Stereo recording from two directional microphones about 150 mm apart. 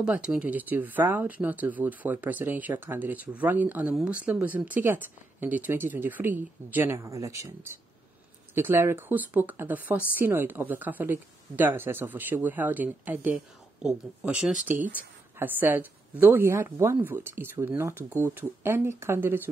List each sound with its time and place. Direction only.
0.0 s speech: 5° right (ahead or behind)